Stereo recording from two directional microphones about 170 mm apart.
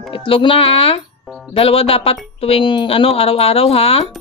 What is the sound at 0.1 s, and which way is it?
Speech, 30° left (ahead or behind).